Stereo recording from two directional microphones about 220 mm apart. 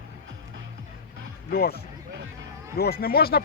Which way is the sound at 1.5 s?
45° left (ahead or behind).